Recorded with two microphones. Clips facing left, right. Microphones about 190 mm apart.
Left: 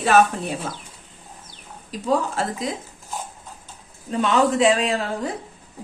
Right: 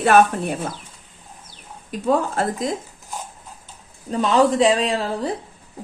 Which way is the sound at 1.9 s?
55° right (ahead or behind).